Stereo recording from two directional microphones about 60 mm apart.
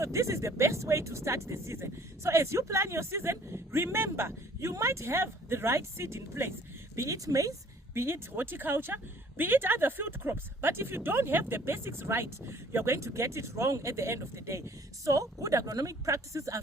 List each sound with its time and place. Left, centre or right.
0.0 s speech: right
6.9 s speech: right
7.9 s speech: right
15.0 s a woman's voice: right